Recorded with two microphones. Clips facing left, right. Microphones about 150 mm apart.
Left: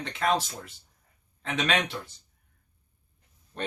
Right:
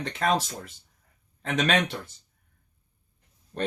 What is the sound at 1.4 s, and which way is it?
Speech, 45° right (ahead or behind).